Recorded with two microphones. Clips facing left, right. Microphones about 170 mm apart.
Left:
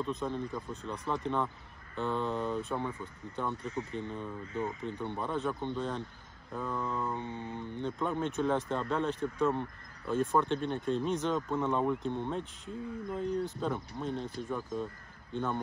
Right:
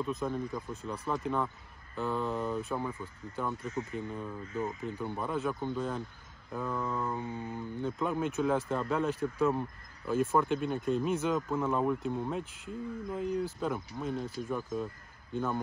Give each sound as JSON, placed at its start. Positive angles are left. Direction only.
{"t": 0.0, "sound": "speech", "side_deg": -5}
{"t": 3.6, "sound": "speech", "side_deg": 35}
{"t": 4.0, "sound": "speech", "side_deg": -5}
{"t": 7.2, "sound": "speech", "side_deg": 25}
{"t": 7.5, "sound": "speech", "side_deg": -5}